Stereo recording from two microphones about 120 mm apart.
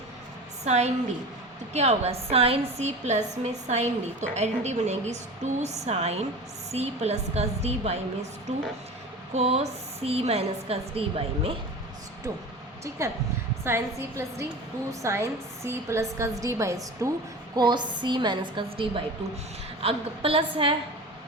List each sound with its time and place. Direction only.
0.6 s a woman's voice: 70° right (ahead or behind)
9.3 s a woman's voice: 60° right (ahead or behind)
13.0 s a woman's voice: 25° right (ahead or behind)
17.5 s a woman's voice: 35° right (ahead or behind)